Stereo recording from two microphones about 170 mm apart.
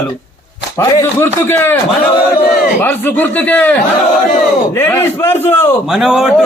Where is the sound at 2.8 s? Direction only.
10° left (ahead or behind).